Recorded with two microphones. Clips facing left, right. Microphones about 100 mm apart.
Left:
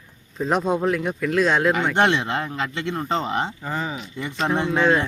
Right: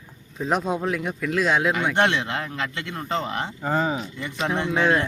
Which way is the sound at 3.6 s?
45° right (ahead or behind).